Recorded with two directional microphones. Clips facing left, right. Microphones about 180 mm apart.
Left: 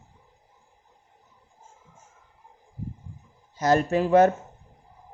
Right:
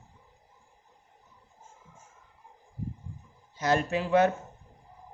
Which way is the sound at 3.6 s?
40° left (ahead or behind).